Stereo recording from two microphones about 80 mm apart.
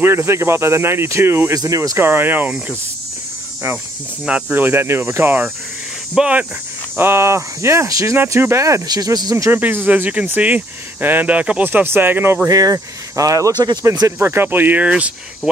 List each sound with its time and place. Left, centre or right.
0.0 s speech: right
1.5 s speech: right
2.0 s speech: right
4.3 s speech: right
6.1 s speech: centre
7.0 s speech: right
8.8 s speech: right
9.5 s speech: right
12.4 s speech: right
14.2 s speech: right